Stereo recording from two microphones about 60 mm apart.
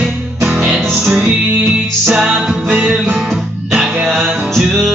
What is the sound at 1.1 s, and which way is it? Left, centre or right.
Music, centre.